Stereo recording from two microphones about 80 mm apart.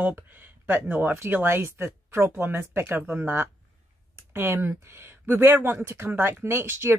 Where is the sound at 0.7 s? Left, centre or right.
Right.